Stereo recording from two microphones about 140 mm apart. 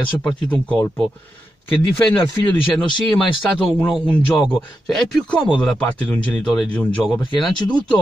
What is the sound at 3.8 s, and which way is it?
Speech, 10° left (ahead or behind).